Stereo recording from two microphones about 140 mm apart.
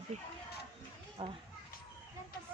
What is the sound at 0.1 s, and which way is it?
Speech, 55° right (ahead or behind).